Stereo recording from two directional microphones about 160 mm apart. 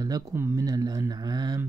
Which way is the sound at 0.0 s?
20° right (ahead or behind).